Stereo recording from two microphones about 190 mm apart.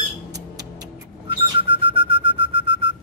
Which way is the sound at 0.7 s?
25° right (ahead or behind).